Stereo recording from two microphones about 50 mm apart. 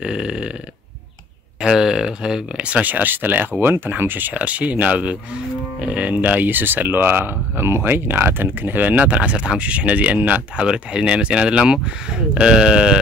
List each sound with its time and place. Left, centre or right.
0.0 s speech: centre
1.6 s speech: centre
2.6 s speech: right
4.3 s speech: right
6.4 s speech: right; by 13.0 s centre